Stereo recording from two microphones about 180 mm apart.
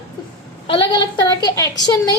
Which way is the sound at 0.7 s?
25° left (ahead or behind).